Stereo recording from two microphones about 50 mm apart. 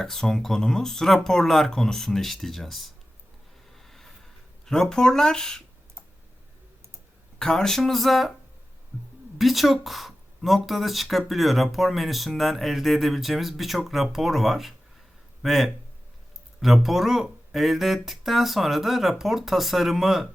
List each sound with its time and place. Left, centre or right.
0.0 s speech: centre
3.8 s a sound: centre
4.6 s speech: centre
7.3 s speech: centre
9.4 s speech: centre